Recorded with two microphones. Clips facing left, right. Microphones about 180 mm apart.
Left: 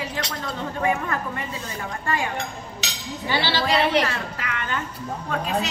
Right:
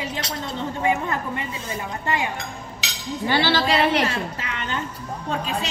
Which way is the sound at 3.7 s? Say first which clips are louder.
Right 1 dB; 25° right (ahead or behind).